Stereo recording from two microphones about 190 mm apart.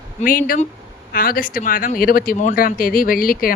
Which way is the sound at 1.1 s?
50° left (ahead or behind).